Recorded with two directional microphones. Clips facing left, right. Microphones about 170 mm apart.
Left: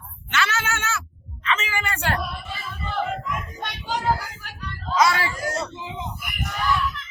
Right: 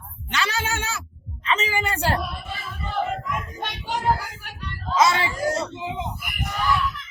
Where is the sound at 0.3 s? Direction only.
35° right (ahead or behind).